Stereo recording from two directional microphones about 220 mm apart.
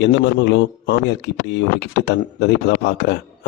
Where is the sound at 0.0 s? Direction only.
50° left (ahead or behind).